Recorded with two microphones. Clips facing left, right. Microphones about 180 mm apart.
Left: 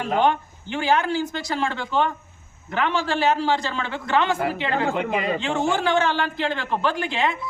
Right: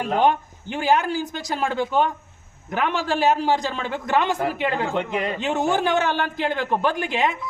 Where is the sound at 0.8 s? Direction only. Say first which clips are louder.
Right 1 dB; 15° right (ahead or behind).